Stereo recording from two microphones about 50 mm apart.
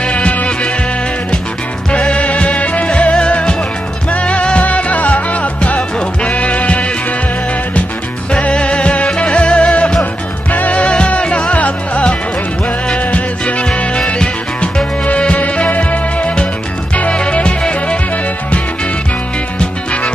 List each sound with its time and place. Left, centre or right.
0.0 s music: left
1.9 s music: left
8.3 s music: left
19.6 s music: left